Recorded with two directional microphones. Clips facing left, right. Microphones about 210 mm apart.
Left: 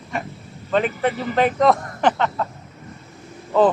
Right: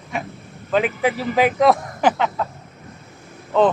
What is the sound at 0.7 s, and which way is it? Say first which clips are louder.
Speech: right 1 dB; 5° right (ahead or behind).